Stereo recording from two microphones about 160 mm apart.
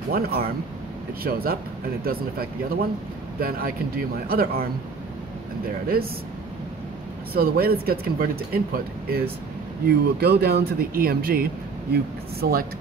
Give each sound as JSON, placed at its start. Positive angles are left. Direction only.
{"t": 0.1, "sound": "speech", "side_deg": -70}
{"t": 7.3, "sound": "speech", "side_deg": -70}
{"t": 9.8, "sound": "speech", "side_deg": -85}